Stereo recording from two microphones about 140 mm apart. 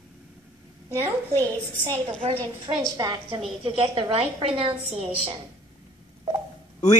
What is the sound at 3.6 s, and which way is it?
A woman's voice, 40° right (ahead or behind).